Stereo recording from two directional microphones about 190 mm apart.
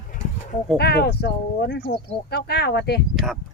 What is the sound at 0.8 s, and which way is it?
Speech, 60° left (ahead or behind).